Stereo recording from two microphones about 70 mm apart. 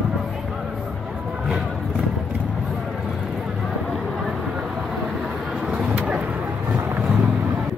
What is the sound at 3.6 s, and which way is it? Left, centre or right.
Vehicle, centre.